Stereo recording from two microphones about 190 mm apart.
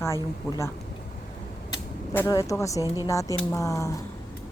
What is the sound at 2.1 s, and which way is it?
A woman's voice, 15° left (ahead or behind).